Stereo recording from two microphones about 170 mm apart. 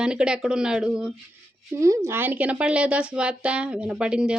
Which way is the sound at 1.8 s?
15° right (ahead or behind).